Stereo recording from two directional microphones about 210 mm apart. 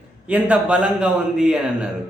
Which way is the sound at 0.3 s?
5° right (ahead or behind).